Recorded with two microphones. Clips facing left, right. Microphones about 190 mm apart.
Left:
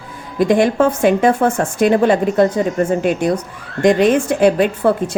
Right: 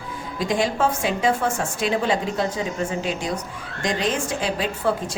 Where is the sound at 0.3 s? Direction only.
55° left (ahead or behind).